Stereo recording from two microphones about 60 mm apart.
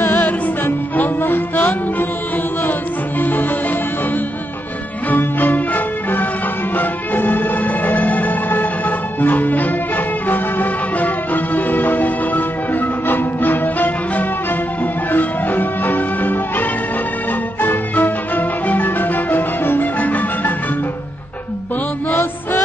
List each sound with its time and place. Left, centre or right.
0.0 s music: left
3.2 s music: left
5.1 s music: left
22.1 s music: left